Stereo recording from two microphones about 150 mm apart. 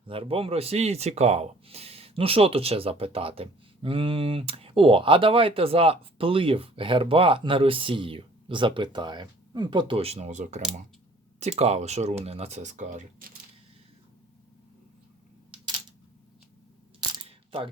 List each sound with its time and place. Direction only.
0.1 s speech: 40° right (ahead or behind); by 13.2 s 60° right (ahead or behind)
17.2 s camera: 40° right (ahead or behind)